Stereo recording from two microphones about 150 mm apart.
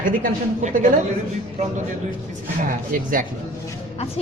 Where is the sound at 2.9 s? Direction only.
65° right (ahead or behind).